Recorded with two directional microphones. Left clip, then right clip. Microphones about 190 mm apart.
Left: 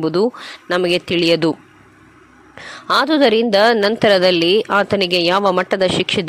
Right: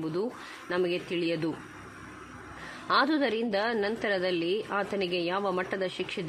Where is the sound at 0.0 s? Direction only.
45° left (ahead or behind).